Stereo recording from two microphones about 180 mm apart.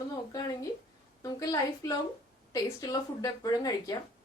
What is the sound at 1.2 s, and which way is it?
A woman's voice, 20° left (ahead or behind).